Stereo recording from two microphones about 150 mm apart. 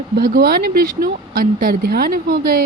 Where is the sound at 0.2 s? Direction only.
90° right.